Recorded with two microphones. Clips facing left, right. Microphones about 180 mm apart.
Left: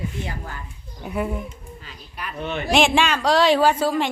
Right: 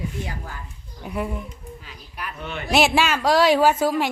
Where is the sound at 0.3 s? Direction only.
5° right (ahead or behind).